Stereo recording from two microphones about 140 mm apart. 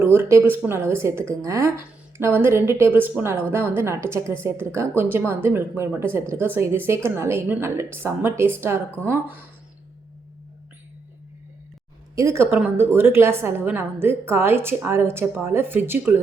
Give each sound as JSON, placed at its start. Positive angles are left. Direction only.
{"t": 0.0, "sound": "a woman's voice", "side_deg": -15}
{"t": 12.1, "sound": "a woman's voice", "side_deg": -20}